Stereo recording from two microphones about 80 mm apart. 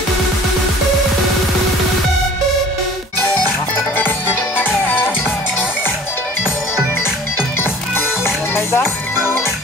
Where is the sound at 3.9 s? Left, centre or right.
Left.